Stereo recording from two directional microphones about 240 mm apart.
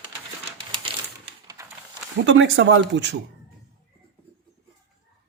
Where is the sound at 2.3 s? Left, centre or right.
Right.